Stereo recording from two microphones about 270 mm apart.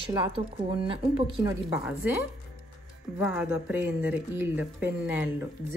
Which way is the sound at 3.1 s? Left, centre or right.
Centre.